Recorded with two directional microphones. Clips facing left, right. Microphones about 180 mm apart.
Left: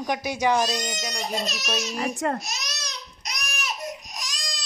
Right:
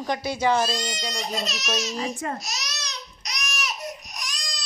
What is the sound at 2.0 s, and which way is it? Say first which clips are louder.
Speech: left 3 dB; 60° left (ahead or behind).